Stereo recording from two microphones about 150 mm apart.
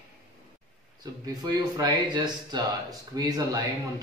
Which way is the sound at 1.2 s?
30° right (ahead or behind).